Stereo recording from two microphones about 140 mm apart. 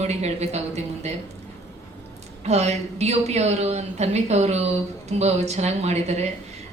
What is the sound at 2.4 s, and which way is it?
Speech, 50° right (ahead or behind).